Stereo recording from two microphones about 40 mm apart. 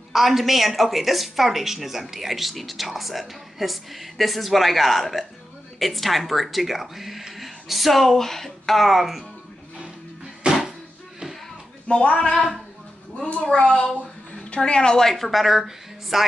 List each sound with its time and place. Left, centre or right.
0.1 s a woman's voice: centre
10.4 s a sound: centre
11.9 s speech: left
13.7 s a child's voice: centre
14.3 s speech: left
15.1 s a woman's voice: centre